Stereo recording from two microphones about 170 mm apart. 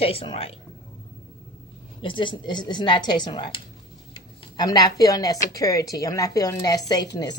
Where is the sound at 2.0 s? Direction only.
30° left (ahead or behind).